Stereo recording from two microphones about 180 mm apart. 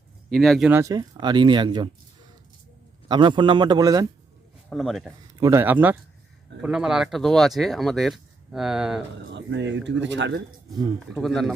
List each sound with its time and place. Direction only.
0.3 s speech: centre (ahead or behind)
0.7 s speech: 15° right (ahead or behind)
3.1 s speech: 25° right (ahead or behind)
4.7 s speech: centre (ahead or behind)
5.3 s speech: 15° right (ahead or behind)
9.3 s speech: 80° right
11.1 s speech: 5° left (ahead or behind)